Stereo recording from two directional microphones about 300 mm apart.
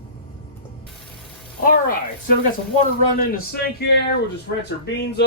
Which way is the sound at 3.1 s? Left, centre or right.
Left.